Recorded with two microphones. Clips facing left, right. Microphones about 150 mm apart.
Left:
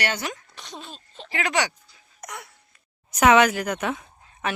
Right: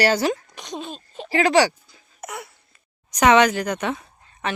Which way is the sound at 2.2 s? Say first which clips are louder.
Right 5 dB; 5° right (ahead or behind).